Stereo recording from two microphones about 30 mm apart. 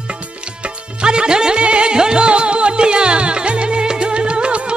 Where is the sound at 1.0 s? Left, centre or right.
Right.